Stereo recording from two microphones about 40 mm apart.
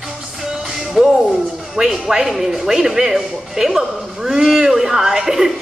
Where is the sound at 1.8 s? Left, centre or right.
Centre.